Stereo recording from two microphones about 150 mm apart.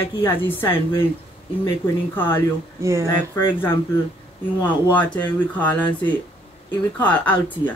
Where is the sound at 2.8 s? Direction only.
20° right (ahead or behind).